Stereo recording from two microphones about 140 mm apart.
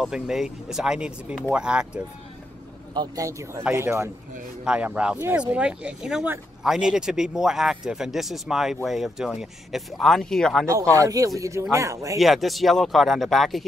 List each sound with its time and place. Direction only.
0.0 s speech: 5° right (ahead or behind)
2.9 s speech: 25° right (ahead or behind); by 10.6 s 5° left (ahead or behind)
10.7 s speech: 25° right (ahead or behind)
12.2 s speech: centre (ahead or behind)